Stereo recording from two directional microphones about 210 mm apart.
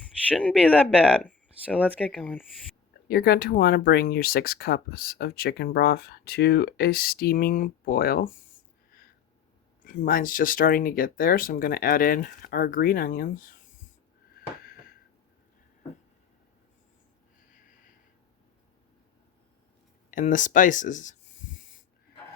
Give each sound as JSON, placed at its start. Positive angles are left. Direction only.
{"t": 0.0, "sound": "a sound", "side_deg": 5}
{"t": 0.5, "sound": "speech", "side_deg": -5}
{"t": 2.0, "sound": "speech", "side_deg": 5}
{"t": 3.1, "sound": "speech", "side_deg": 50}
{"t": 9.8, "sound": "speech", "side_deg": 40}
{"t": 20.1, "sound": "speech", "side_deg": 40}